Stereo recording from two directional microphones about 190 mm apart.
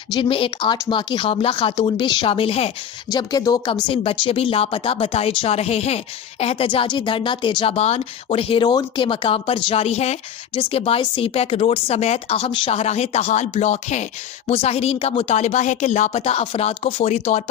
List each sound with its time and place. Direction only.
0.1 s speech: 25° left (ahead or behind)
3.1 s a woman's voice: 20° left (ahead or behind)